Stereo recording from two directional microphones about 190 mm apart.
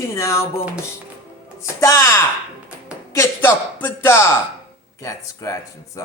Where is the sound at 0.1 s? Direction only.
15° left (ahead or behind).